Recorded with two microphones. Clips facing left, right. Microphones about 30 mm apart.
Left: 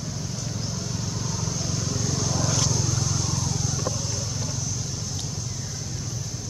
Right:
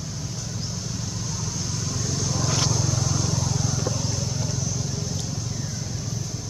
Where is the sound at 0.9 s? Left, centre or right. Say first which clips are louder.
Left 1 dB; centre.